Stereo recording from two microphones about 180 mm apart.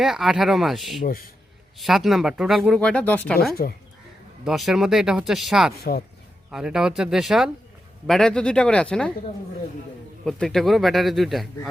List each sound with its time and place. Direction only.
0.0 s speech: centre (ahead or behind)
1.0 s a man's voice: 55° left (ahead or behind)
1.8 s speech: centre (ahead or behind)
3.6 s speech: 55° left (ahead or behind)
4.4 s speech: centre (ahead or behind)
10.2 s speech: centre (ahead or behind)